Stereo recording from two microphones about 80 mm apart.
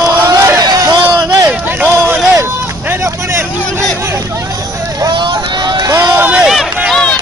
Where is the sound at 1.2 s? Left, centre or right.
Right.